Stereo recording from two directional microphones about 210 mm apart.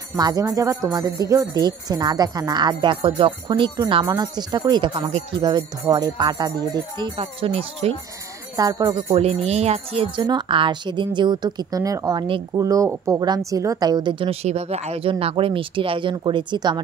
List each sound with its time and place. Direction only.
0.2 s speech: 15° right (ahead or behind)
9.2 s speech: 30° right (ahead or behind)